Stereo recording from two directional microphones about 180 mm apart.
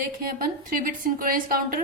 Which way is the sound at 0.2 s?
55° right (ahead or behind).